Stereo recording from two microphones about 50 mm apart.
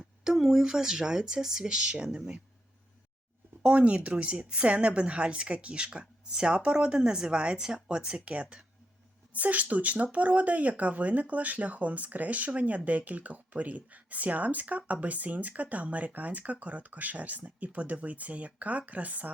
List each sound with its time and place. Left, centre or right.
0.3 s speech: centre
3.6 s a woman's voice: right